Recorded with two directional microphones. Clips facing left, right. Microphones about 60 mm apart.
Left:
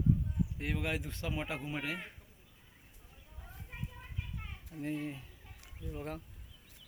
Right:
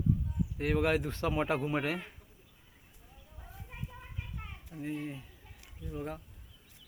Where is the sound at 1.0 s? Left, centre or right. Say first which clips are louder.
Right 8 dB; right.